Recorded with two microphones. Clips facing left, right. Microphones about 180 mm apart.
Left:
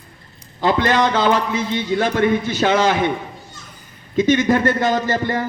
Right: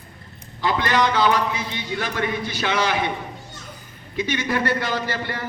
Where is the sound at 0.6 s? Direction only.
45° left (ahead or behind).